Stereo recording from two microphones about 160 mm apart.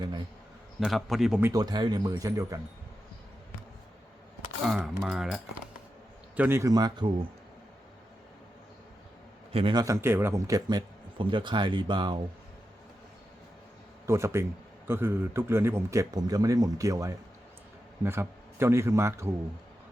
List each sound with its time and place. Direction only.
0.8 s a man's voice: centre (ahead or behind)
1.4 s speech: 20° right (ahead or behind)
5.0 s a man's voice: centre (ahead or behind)
6.3 s speech: 10° right (ahead or behind); by 7.3 s 30° right (ahead or behind)
9.5 s a man's voice: 35° right (ahead or behind)
9.7 s speech: 20° right (ahead or behind)
14.1 s a man's voice: 15° right (ahead or behind)